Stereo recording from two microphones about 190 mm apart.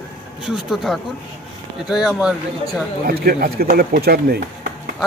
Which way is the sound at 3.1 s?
55° right (ahead or behind).